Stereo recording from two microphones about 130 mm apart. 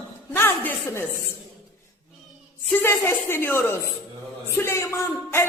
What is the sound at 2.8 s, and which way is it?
A woman's voice, 20° left (ahead or behind).